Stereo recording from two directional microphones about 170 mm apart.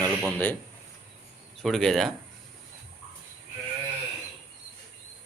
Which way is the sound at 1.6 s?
Centre (ahead or behind).